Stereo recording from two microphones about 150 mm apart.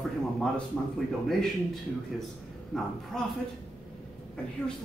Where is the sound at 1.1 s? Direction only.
Centre (ahead or behind).